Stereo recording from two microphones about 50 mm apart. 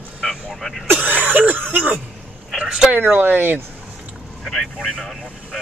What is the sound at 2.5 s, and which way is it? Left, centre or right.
Speech, centre.